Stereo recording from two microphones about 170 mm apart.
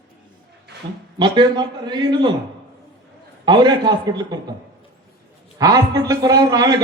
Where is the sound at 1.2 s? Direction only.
25° right (ahead or behind).